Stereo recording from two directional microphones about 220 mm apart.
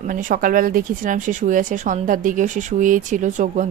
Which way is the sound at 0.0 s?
35° right (ahead or behind).